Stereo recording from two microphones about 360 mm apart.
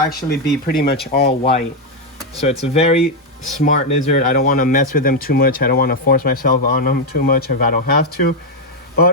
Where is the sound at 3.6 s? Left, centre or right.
Centre.